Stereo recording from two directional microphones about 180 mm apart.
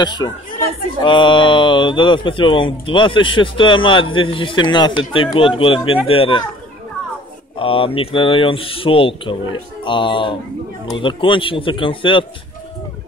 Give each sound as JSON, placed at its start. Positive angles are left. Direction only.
{"t": 0.0, "sound": "speech", "side_deg": 25}
{"t": 7.5, "sound": "speech", "side_deg": 30}